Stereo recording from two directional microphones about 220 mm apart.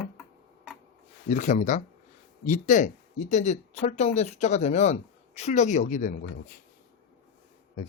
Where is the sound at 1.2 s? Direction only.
35° left (ahead or behind).